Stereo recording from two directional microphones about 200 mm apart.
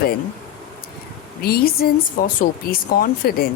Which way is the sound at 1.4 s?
50° left (ahead or behind).